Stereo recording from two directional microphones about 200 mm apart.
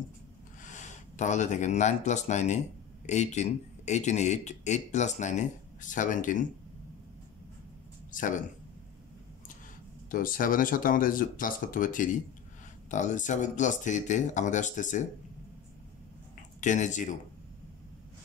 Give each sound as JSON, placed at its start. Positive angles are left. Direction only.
{"t": 0.7, "sound": "a man's voice", "side_deg": 35}
{"t": 8.1, "sound": "speech", "side_deg": 40}
{"t": 10.1, "sound": "a man's voice", "side_deg": 45}
{"t": 16.6, "sound": "a man's voice", "side_deg": 40}